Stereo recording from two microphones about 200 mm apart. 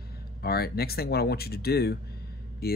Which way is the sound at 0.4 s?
50° left (ahead or behind).